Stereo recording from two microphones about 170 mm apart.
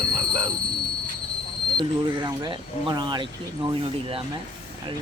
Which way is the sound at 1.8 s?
25° right (ahead or behind).